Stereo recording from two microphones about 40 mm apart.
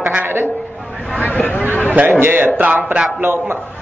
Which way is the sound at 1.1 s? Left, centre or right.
Left.